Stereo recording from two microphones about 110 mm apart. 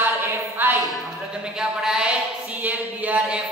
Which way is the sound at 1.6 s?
5° right (ahead or behind).